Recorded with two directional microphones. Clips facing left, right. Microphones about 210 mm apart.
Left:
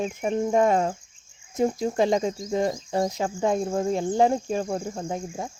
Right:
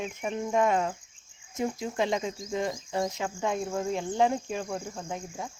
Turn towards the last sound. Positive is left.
turn(degrees=40)  # may be behind; listen again after turning